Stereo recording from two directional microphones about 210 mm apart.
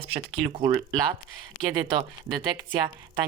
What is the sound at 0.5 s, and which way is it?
Speech, 25° right (ahead or behind).